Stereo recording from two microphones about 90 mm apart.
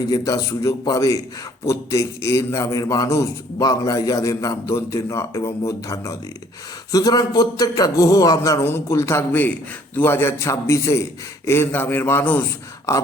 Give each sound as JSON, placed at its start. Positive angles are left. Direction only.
{"t": 0.1, "sound": "a man's voice", "side_deg": 40}
{"t": 8.6, "sound": "a man's voice", "side_deg": 30}